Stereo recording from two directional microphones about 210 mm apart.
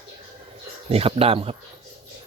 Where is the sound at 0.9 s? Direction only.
30° right (ahead or behind).